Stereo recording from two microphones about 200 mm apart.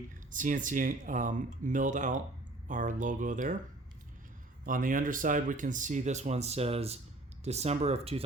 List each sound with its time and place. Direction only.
0.3 s speech: 40° right (ahead or behind)
4.6 s speech: 45° right (ahead or behind)